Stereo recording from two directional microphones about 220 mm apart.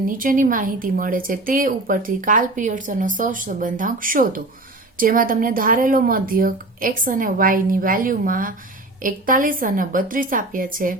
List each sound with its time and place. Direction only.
0.1 s speech: 40° right (ahead or behind)